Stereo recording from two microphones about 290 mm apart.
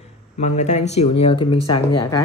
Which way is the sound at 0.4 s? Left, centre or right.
Left.